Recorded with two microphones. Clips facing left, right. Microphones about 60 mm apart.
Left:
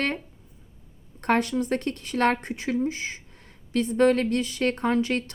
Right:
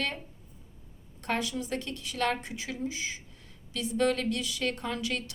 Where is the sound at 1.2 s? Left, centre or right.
Left.